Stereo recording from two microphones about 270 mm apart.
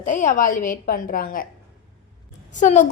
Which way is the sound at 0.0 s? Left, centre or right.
Left.